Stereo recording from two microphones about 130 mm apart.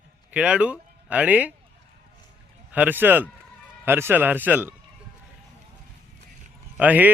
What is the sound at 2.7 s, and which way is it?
Speech, 15° right (ahead or behind).